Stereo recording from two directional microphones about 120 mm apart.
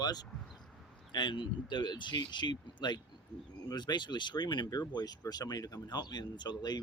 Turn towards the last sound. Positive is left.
turn(degrees=35)  # may be behind; listen again after turning